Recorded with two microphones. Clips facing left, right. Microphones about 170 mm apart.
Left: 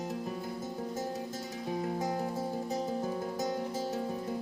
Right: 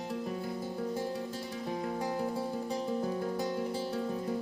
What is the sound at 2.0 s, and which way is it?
Music, 40° left (ahead or behind).